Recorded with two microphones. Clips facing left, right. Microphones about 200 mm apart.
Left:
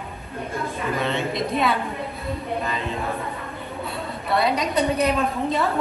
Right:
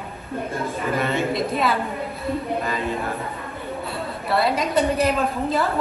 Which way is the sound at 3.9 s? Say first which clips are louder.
Even; centre (ahead or behind).